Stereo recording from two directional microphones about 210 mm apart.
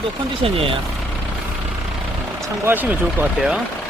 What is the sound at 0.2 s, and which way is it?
Speech, 25° right (ahead or behind).